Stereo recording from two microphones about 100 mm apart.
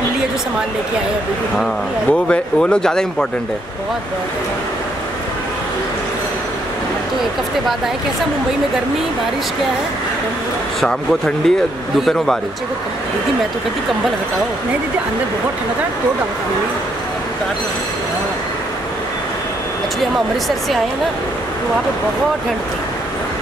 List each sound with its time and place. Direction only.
1.6 s speech: 10° left (ahead or behind)
10.8 s speech: 5° left (ahead or behind)